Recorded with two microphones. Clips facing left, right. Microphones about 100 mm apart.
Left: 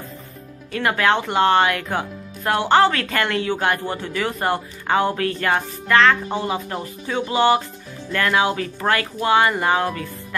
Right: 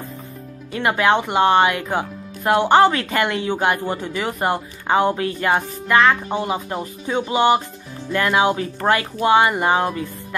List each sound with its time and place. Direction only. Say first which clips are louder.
0.7 s speech: right 2 dB; 20° right (ahead or behind)